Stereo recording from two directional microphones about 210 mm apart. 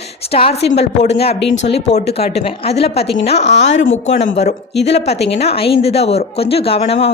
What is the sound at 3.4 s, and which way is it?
Speech, 55° left (ahead or behind).